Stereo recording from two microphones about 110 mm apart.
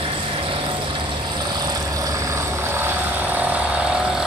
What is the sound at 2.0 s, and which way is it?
Vehicle, 30° right (ahead or behind).